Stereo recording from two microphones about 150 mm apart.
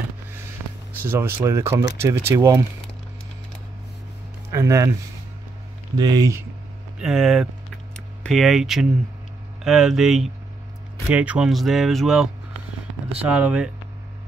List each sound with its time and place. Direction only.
1.0 s speech: 15° right (ahead or behind)
4.5 s speech: 20° right (ahead or behind)
5.9 s speech: 25° right (ahead or behind)
7.0 s speech: 5° right (ahead or behind)
7.9 s a sound: 5° left (ahead or behind)
9.6 s speech: centre (ahead or behind)